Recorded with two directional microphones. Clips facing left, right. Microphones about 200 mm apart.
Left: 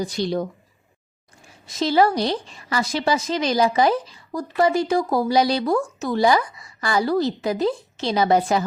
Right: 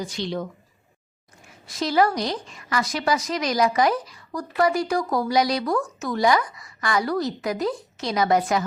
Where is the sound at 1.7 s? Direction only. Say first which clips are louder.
Left 3 dB; 25° left (ahead or behind).